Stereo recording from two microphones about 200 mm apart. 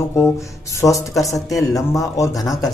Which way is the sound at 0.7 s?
15° left (ahead or behind).